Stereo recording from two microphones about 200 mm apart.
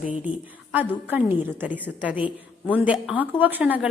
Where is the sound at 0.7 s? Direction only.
10° right (ahead or behind).